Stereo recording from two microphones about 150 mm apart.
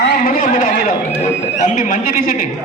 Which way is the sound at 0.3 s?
60° left (ahead or behind).